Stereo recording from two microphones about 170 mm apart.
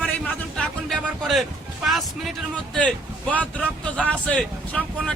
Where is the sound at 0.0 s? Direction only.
10° left (ahead or behind).